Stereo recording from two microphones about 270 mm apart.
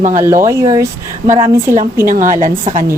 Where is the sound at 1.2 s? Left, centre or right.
Right.